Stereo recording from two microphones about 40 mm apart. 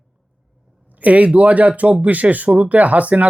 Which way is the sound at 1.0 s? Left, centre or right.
Right.